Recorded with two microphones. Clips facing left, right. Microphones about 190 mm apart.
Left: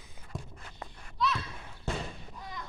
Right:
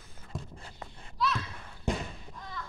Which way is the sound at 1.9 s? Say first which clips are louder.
Right 3 dB; 15° right (ahead or behind).